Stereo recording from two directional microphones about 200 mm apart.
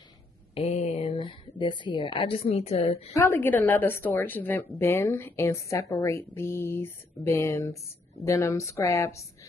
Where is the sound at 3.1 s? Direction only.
15° left (ahead or behind).